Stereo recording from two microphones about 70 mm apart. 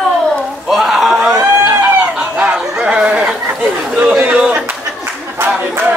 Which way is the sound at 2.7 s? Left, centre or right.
Centre.